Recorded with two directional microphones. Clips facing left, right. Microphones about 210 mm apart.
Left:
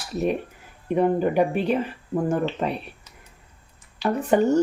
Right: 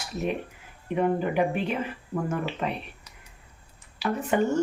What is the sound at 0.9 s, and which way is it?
Speech, 40° left (ahead or behind).